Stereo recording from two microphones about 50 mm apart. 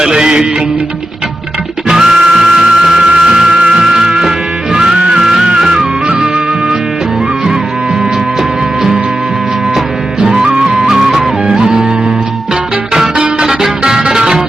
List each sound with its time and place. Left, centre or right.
0.0 s music: centre
1.9 s music: centre
9.7 s music: centre
12.9 s music: centre